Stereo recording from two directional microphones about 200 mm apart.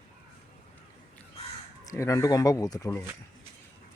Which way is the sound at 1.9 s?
15° left (ahead or behind).